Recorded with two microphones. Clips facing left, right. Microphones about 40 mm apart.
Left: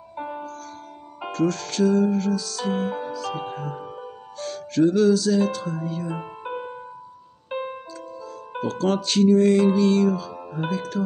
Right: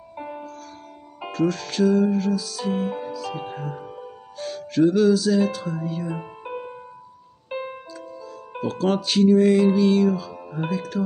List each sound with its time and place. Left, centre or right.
0.1 s music: centre
1.3 s music: centre
3.8 s music: left
4.4 s music: centre
6.1 s music: left
8.6 s music: centre